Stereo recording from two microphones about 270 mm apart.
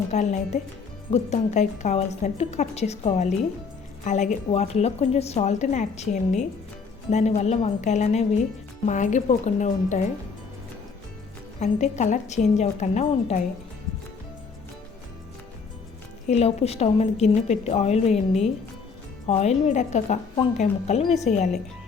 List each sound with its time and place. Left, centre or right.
0.1 s a woman's voice: left
11.6 s a woman's voice: left
16.3 s a woman's voice: left